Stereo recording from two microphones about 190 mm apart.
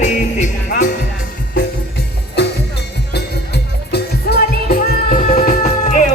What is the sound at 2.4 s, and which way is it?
Music, 60° left (ahead or behind).